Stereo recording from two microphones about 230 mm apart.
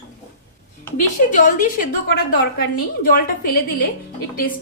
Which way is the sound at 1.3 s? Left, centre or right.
Left.